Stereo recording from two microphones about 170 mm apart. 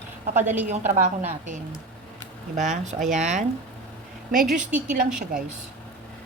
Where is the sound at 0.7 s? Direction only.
40° right (ahead or behind).